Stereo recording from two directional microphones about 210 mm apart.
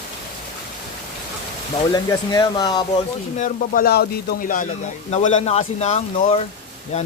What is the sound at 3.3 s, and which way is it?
Speech, 40° left (ahead or behind).